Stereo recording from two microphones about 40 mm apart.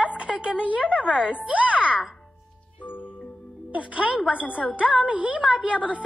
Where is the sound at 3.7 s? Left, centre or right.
Right.